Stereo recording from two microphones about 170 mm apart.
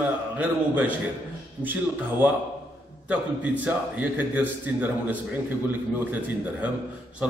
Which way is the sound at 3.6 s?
10° right (ahead or behind).